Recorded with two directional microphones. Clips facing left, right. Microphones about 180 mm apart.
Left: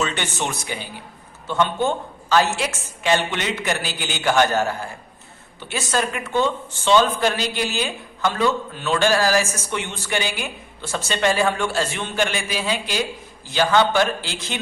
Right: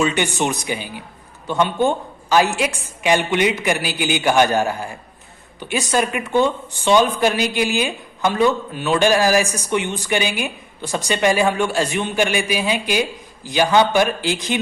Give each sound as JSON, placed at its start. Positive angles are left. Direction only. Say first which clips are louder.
{"t": 0.0, "sound": "speech", "louder": "right 6 dB", "side_deg": -15}